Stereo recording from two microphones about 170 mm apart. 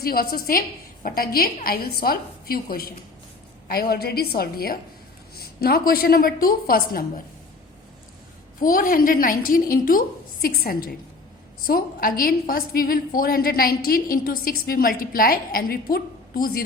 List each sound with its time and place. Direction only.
0.0 s a woman's voice: 60° left (ahead or behind)
8.6 s a woman's voice: 55° left (ahead or behind)